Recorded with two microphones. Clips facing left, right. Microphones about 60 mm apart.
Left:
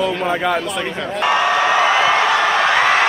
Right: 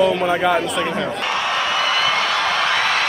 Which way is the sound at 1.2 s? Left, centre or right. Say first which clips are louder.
Left 5 dB; left.